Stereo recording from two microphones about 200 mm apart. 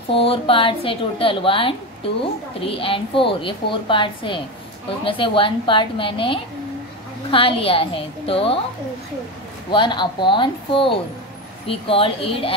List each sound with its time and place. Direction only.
0.1 s a woman's voice: 25° left (ahead or behind)
9.7 s a woman's voice: 25° left (ahead or behind)